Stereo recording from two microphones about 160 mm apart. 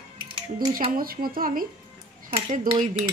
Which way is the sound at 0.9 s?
65° right (ahead or behind).